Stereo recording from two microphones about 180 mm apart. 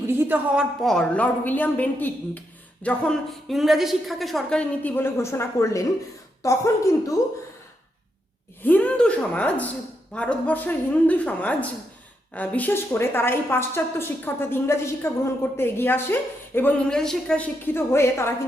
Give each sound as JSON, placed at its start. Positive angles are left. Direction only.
{"t": 0.1, "sound": "a woman's voice", "side_deg": -10}
{"t": 8.6, "sound": "a woman's voice", "side_deg": 10}